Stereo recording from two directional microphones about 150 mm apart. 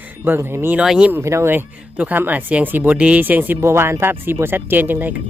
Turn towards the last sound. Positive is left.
turn(degrees=-10)  # may be behind; listen again after turning